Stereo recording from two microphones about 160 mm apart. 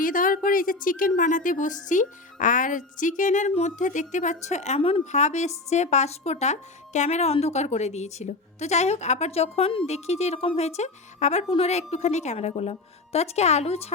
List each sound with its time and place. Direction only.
0.0 s a woman's voice: 60° left (ahead or behind); by 13.9 s 40° left (ahead or behind)